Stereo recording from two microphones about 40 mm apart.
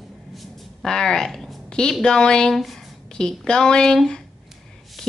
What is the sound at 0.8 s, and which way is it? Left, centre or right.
Speech, centre.